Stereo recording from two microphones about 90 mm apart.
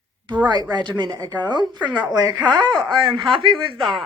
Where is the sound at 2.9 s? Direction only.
70° right (ahead or behind).